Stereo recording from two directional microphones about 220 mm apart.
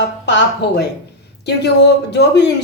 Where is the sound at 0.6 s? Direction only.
50° left (ahead or behind).